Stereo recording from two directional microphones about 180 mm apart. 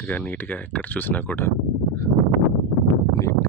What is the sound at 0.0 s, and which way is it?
Speech, 10° left (ahead or behind).